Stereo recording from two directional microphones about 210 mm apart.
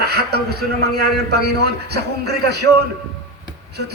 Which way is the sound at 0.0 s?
50° right (ahead or behind).